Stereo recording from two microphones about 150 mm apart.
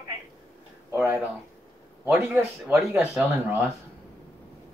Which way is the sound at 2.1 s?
5° right (ahead or behind).